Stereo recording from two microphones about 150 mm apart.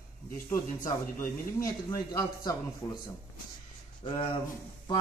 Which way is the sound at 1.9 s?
25° left (ahead or behind).